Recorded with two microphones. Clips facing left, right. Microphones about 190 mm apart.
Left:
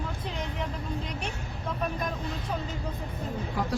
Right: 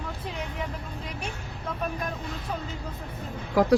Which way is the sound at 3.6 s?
90° right.